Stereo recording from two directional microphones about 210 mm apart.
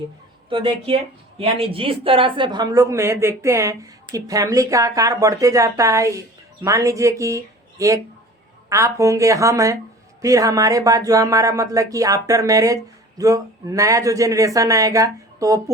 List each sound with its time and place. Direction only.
0.5 s speech: 25° right (ahead or behind)